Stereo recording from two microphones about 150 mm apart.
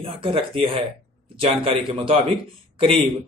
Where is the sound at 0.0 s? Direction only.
40° right (ahead or behind).